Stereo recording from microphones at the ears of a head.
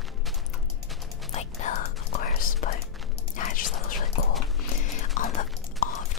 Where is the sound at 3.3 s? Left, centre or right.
Left.